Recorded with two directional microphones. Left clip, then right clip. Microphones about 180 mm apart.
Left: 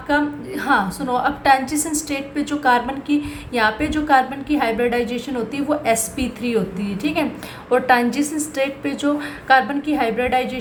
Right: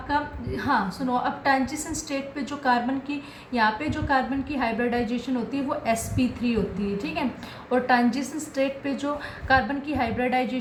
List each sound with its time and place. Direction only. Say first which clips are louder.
0.1 s a woman's voice: left 7 dB; 40° left (ahead or behind)